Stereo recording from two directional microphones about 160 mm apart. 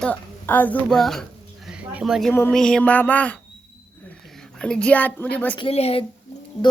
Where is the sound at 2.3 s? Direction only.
15° left (ahead or behind).